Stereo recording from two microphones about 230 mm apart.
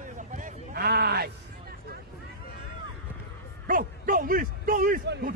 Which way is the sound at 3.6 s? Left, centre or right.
Right.